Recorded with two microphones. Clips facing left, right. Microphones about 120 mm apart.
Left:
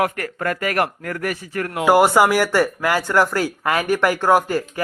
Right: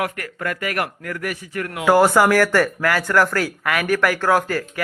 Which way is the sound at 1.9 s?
15° left (ahead or behind).